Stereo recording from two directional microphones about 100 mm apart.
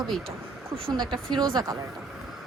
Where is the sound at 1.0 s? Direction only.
5° left (ahead or behind).